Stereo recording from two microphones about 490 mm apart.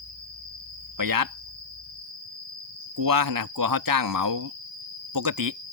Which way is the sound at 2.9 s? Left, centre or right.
Right.